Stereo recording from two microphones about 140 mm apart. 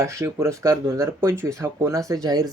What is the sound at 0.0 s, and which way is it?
Speech, 25° right (ahead or behind).